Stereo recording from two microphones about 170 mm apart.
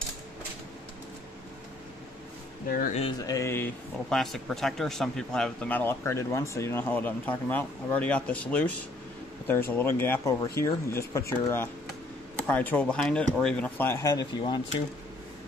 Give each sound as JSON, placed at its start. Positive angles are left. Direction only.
{"t": 2.9, "sound": "a sound", "side_deg": 35}
{"t": 3.3, "sound": "speech", "side_deg": 15}
{"t": 4.1, "sound": "speech", "side_deg": 0}